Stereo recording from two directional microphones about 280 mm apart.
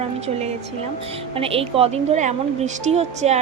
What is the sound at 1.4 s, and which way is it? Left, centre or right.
Speech, centre.